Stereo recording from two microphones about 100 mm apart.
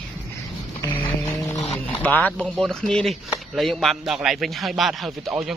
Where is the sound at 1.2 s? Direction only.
35° left (ahead or behind).